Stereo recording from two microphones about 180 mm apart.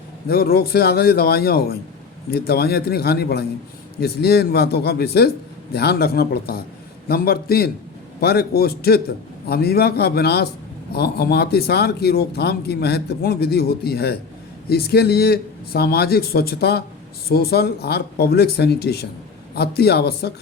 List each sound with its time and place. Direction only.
0.3 s speech: 60° left (ahead or behind)